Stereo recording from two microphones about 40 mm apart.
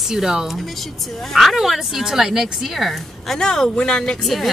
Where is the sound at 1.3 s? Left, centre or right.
Centre.